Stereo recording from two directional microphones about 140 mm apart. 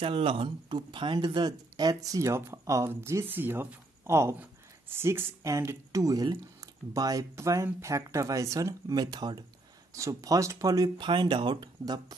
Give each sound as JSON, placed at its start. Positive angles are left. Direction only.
{"t": 0.0, "sound": "speech", "side_deg": -40}